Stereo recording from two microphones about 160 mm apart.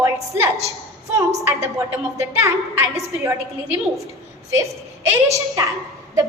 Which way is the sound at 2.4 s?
20° right (ahead or behind).